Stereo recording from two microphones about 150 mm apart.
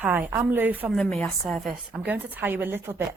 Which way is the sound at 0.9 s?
Centre (ahead or behind).